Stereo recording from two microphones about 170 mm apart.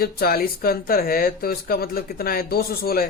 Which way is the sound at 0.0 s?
60° left (ahead or behind).